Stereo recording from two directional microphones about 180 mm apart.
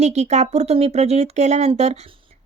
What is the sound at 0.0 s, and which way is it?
A woman's voice, 40° right (ahead or behind).